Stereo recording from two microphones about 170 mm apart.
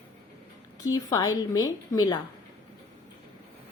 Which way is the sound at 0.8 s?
20° left (ahead or behind).